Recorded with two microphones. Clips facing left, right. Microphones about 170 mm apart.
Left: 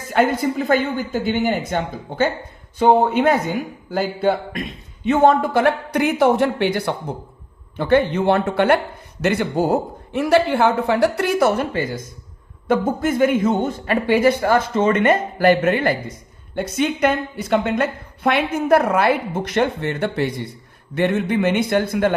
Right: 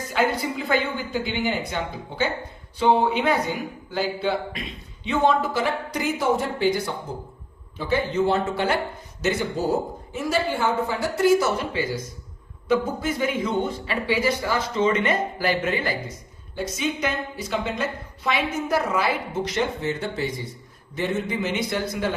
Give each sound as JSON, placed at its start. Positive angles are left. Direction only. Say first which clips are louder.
{"t": 0.1, "sound": "a woman's voice", "louder": "left 6 dB", "side_deg": 50}